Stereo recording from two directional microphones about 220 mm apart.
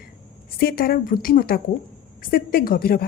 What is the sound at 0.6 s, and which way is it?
A woman's voice, 40° left (ahead or behind).